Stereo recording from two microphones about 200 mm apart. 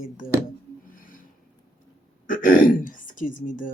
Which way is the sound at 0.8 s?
45° left (ahead or behind).